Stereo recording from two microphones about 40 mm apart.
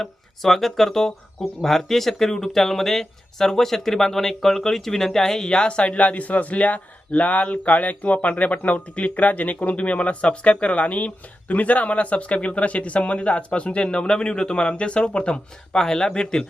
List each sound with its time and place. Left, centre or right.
0.0 s speech: centre